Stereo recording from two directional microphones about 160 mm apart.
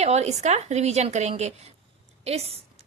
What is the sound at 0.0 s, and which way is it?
A woman's voice, 45° right (ahead or behind).